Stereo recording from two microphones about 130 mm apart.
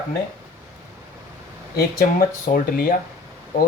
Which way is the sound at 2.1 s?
90° left.